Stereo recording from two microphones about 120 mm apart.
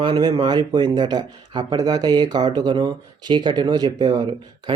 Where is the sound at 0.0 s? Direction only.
35° right (ahead or behind).